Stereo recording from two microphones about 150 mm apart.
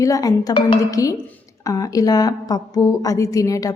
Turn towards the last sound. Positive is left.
turn(degrees=20)  # may be behind; listen again after turning